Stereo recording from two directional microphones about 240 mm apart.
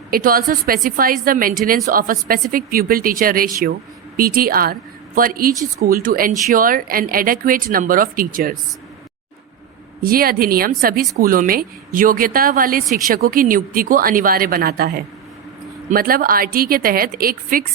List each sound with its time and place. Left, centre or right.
0.1 s a woman's voice: right
10.0 s a woman's voice: right